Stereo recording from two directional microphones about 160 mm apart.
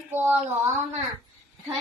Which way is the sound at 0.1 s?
10° right (ahead or behind).